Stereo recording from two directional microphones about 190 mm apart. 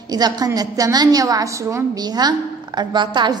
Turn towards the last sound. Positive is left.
turn(degrees=-25)  # may be behind; listen again after turning